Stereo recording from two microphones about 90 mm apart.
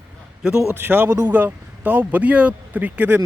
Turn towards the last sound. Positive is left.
turn(degrees=-20)  # may be behind; listen again after turning